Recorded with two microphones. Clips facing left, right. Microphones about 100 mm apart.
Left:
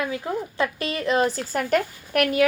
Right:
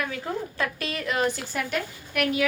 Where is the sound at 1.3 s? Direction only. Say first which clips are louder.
Left 6 dB; 40° left (ahead or behind).